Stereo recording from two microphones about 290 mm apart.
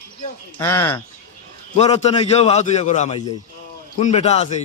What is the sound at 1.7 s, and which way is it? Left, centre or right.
A man's voice, left.